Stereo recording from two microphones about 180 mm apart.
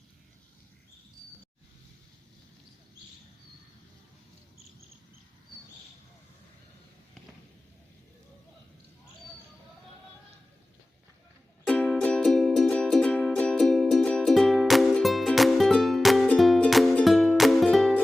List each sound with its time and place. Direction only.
11.6 s music: 5° left (ahead or behind)